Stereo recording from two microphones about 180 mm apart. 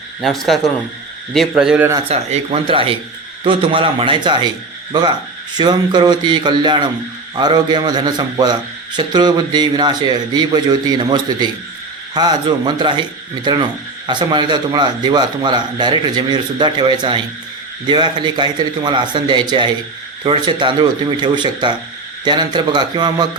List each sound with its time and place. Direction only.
0.2 s a man's voice: centre (ahead or behind)
2.0 s a man's voice: 30° right (ahead or behind)